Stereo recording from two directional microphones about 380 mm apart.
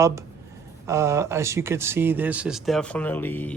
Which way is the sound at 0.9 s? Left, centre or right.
Centre.